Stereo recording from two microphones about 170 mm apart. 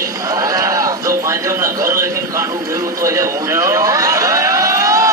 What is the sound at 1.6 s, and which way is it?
Speech, 15° right (ahead or behind).